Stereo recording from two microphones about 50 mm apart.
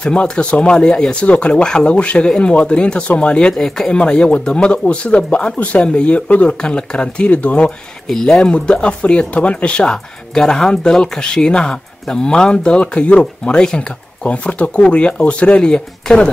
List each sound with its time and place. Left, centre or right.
0.0 s speech: left
3.5 s speech: centre
3.9 s speech: left
8.1 s speech: centre